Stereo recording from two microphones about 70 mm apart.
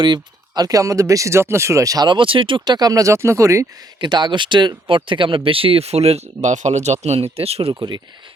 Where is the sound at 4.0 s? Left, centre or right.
Right.